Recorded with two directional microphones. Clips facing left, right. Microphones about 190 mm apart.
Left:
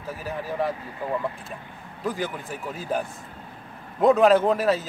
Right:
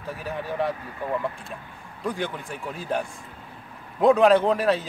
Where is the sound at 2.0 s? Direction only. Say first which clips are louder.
Even; centre (ahead or behind).